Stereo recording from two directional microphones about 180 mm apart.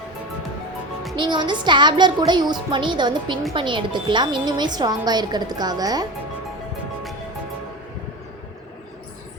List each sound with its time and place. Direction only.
1.1 s speech: 25° right (ahead or behind)